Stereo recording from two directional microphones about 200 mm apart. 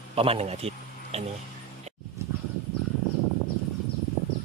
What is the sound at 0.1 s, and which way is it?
A man's voice, 30° right (ahead or behind).